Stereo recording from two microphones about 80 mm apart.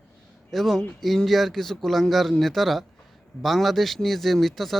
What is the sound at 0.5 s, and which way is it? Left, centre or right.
A man's voice, centre.